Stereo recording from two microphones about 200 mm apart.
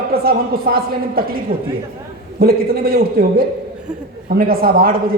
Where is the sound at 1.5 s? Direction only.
25° right (ahead or behind).